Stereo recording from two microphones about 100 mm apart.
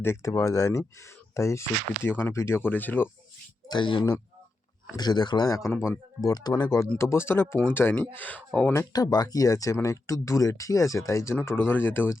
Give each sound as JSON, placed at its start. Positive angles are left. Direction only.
{"t": 0.0, "sound": "speech", "side_deg": 30}
{"t": 3.7, "sound": "speech", "side_deg": 55}
{"t": 5.7, "sound": "speech", "side_deg": 25}
{"t": 6.2, "sound": "speech", "side_deg": 40}
{"t": 7.0, "sound": "speech", "side_deg": 25}
{"t": 8.9, "sound": "speech", "side_deg": 40}
{"t": 11.4, "sound": "speech", "side_deg": 20}